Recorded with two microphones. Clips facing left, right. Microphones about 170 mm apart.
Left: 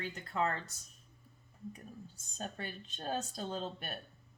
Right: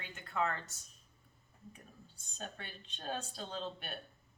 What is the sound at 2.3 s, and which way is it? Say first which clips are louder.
Speech: left 5 dB; 40° left (ahead or behind).